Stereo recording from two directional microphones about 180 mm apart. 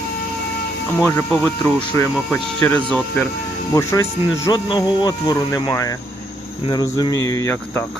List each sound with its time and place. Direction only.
0.9 s speech: 10° left (ahead or behind)